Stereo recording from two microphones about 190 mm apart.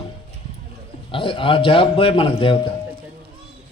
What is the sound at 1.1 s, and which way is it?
A man's voice, 25° left (ahead or behind).